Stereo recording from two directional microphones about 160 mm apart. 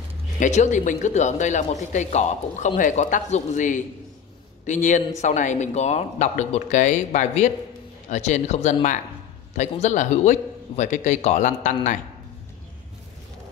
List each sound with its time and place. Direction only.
0.4 s speech: 50° left (ahead or behind)